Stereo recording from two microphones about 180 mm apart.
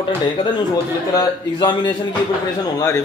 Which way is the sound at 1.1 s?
25° left (ahead or behind).